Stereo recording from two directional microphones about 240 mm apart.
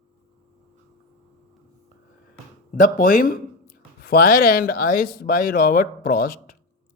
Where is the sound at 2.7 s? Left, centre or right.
Left.